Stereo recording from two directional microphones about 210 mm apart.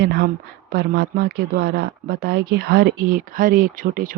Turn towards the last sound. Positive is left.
turn(degrees=-40)  # may be behind; listen again after turning